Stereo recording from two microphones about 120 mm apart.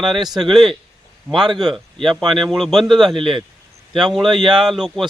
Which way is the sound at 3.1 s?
45° right (ahead or behind).